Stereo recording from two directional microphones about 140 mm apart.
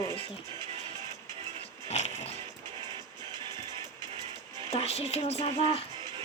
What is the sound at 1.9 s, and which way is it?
Music, 55° left (ahead or behind).